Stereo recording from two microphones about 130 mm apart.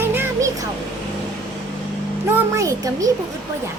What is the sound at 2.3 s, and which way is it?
Speech, 20° right (ahead or behind).